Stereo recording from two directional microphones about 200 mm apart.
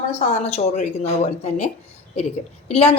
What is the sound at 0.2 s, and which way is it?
Speech, 35° left (ahead or behind).